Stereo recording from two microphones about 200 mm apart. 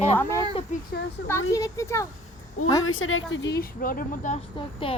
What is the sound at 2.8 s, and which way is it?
A woman's voice, 80° left.